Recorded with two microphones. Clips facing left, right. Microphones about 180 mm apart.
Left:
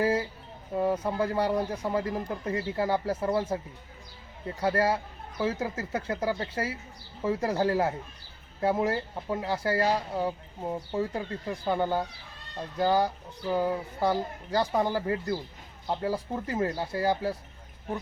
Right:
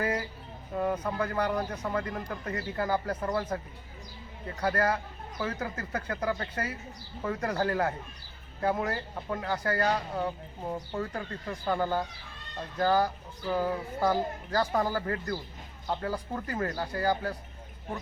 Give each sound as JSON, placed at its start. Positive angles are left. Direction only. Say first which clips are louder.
{"t": 0.0, "sound": "a sound", "louder": "left 5 dB", "side_deg": 30}
{"t": 0.7, "sound": "speech", "louder": "left 3 dB", "side_deg": 25}
{"t": 4.6, "sound": "speech", "louder": "left 2 dB", "side_deg": 25}